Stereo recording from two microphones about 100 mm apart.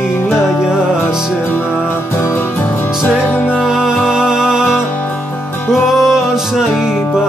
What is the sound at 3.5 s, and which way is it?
Music, 5° right (ahead or behind).